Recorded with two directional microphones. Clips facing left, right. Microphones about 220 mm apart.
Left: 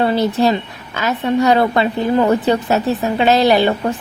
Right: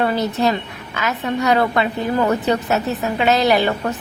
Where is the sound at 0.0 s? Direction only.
30° left (ahead or behind).